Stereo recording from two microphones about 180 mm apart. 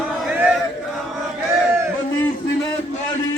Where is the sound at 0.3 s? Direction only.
5° right (ahead or behind).